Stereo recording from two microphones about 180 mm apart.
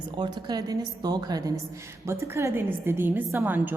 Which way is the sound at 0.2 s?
25° right (ahead or behind).